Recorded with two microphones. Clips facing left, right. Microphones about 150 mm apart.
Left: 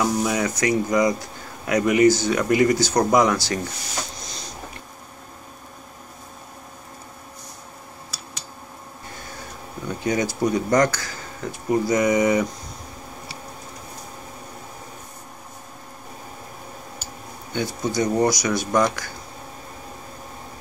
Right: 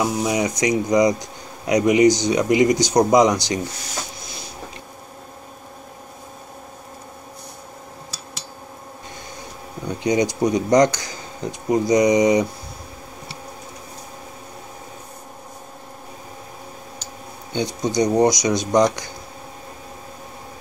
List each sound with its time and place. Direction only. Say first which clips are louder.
0.0 s speech: right 1 dB; 20° right (ahead or behind)
9.8 s speech: right 4 dB; 15° right (ahead or behind)
17.6 s speech: right 3 dB; 15° right (ahead or behind)